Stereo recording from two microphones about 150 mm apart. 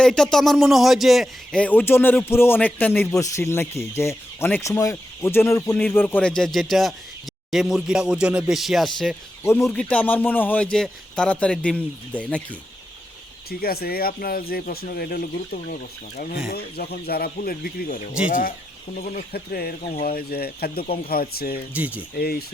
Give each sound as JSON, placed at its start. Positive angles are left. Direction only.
{"t": 0.0, "sound": "a man's voice", "side_deg": 5}
{"t": 9.4, "sound": "a man's voice", "side_deg": 20}
{"t": 13.5, "sound": "speech", "side_deg": 90}
{"t": 16.5, "sound": "speech", "side_deg": 90}
{"t": 18.3, "sound": "speech", "side_deg": 65}
{"t": 19.1, "sound": "speech", "side_deg": 90}
{"t": 21.8, "sound": "speech", "side_deg": -10}
{"t": 22.2, "sound": "speech", "side_deg": 90}